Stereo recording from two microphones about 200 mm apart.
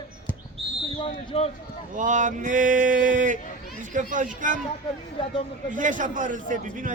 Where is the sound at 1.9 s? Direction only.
40° right (ahead or behind).